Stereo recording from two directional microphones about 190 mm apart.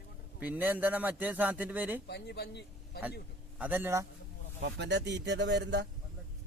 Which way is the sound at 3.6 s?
10° right (ahead or behind).